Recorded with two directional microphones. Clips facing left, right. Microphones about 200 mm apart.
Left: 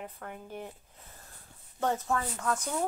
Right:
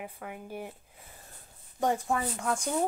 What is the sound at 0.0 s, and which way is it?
Speech, 10° right (ahead or behind).